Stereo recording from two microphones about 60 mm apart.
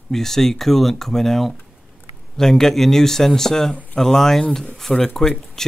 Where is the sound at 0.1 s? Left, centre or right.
Centre.